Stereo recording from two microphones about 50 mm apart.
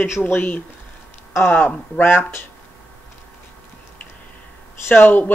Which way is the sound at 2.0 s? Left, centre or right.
Left.